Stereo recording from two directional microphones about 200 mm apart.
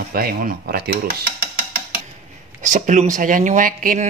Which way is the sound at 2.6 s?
40° right (ahead or behind).